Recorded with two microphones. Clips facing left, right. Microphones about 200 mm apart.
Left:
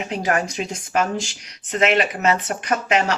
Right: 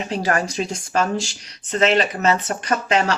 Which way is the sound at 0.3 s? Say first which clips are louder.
Even; 15° left (ahead or behind).